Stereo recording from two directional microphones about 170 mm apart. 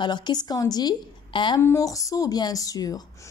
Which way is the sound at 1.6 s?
15° left (ahead or behind).